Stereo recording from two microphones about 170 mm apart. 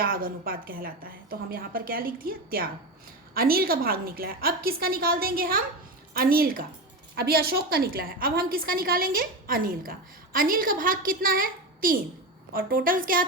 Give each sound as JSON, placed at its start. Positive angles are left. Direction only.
{"t": 0.0, "sound": "a woman's voice", "side_deg": -60}